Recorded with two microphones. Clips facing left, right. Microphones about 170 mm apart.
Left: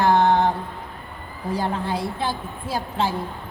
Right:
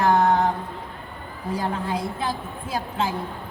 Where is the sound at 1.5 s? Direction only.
30° left (ahead or behind).